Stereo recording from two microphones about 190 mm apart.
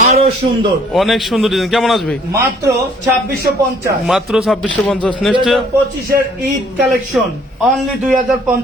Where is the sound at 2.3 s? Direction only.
15° right (ahead or behind).